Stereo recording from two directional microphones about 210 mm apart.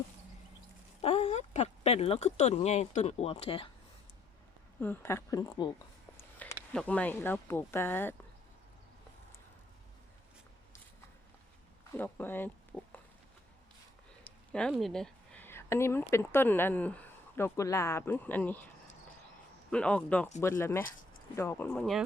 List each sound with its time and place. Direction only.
1.0 s speech: 30° left (ahead or behind)
4.8 s speech: 10° left (ahead or behind)
11.9 s speech: 10° left (ahead or behind)
14.3 s speech: 5° left (ahead or behind)
19.7 s speech: 5° left (ahead or behind)